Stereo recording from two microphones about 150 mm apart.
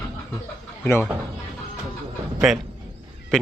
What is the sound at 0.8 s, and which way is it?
Speech, 15° left (ahead or behind).